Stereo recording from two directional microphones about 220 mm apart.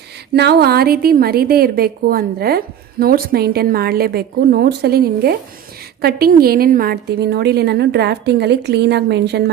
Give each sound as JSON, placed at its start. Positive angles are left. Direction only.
{"t": 0.3, "sound": "a woman's voice", "side_deg": -45}